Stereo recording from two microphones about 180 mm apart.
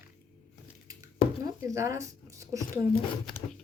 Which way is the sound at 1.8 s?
15° right (ahead or behind).